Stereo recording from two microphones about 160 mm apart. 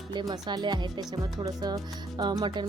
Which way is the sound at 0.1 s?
25° right (ahead or behind).